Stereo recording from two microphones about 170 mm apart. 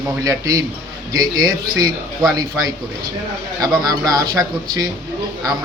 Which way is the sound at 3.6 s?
25° right (ahead or behind).